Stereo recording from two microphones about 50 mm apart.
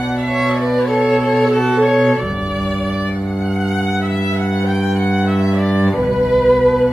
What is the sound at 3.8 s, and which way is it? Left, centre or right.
Violin, centre.